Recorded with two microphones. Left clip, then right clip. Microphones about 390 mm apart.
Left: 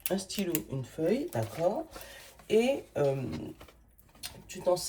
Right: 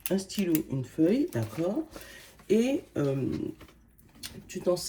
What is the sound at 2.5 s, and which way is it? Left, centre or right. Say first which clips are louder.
Speech: even; left.